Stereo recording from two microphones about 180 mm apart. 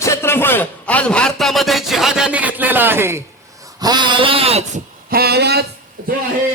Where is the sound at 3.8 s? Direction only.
25° right (ahead or behind).